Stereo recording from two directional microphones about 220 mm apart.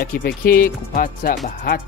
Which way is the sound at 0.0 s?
45° left (ahead or behind).